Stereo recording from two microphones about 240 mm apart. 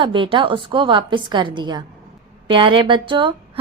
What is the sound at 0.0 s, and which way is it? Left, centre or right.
A woman's voice, right.